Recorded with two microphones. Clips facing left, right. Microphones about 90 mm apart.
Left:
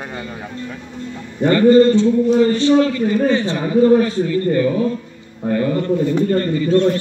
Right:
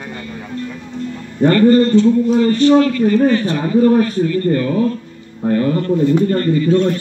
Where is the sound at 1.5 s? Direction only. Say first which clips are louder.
Left 1 dB; 15° left (ahead or behind).